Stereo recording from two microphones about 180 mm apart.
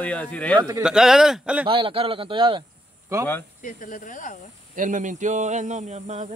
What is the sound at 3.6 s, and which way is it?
Speech, 50° left (ahead or behind).